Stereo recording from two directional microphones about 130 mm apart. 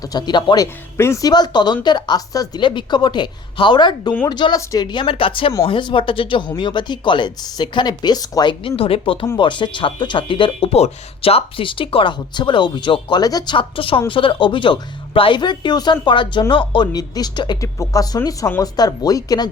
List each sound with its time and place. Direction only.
0.0 s speech: 30° left (ahead or behind)